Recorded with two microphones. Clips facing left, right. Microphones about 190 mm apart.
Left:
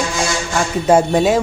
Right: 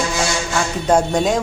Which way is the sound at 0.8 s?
5° left (ahead or behind).